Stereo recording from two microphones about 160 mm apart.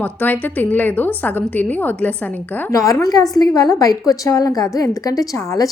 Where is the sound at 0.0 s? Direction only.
10° left (ahead or behind).